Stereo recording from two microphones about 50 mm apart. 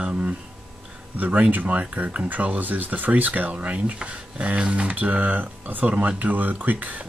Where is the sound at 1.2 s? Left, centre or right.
Right.